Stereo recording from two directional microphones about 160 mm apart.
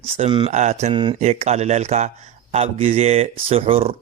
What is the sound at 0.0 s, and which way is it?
Speech, 35° right (ahead or behind).